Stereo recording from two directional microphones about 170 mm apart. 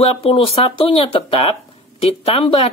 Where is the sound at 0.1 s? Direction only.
35° left (ahead or behind).